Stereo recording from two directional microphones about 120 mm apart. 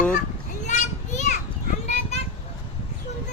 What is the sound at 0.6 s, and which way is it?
Children playing, 80° left.